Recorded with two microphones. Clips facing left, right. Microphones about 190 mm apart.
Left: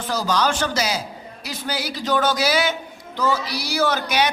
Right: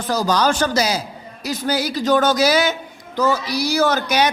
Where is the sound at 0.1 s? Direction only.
40° right (ahead or behind).